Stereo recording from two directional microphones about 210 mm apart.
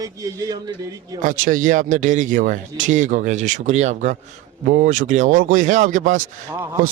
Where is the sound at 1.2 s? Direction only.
40° right (ahead or behind).